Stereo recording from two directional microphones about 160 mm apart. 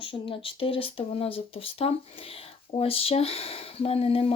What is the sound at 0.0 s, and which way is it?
Speech, 35° left (ahead or behind).